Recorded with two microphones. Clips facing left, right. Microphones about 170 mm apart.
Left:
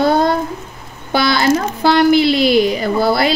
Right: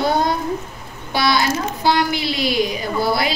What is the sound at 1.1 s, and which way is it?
Speech, 55° left (ahead or behind).